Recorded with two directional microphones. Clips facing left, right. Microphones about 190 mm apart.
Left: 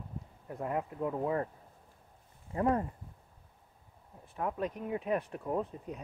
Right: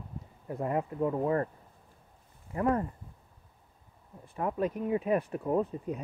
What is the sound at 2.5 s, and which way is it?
Speech, 25° left (ahead or behind).